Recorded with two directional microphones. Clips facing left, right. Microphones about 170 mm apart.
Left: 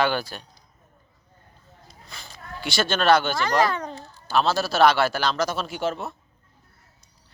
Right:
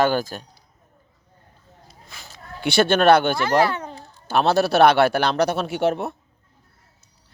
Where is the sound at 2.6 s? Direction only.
60° right (ahead or behind).